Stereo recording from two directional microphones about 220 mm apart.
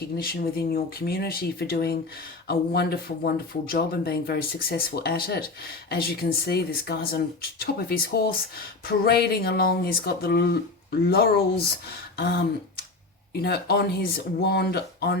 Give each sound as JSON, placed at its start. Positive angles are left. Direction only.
{"t": 0.2, "sound": "speech", "side_deg": 45}
{"t": 12.1, "sound": "a sound", "side_deg": 50}
{"t": 13.4, "sound": "speech", "side_deg": 45}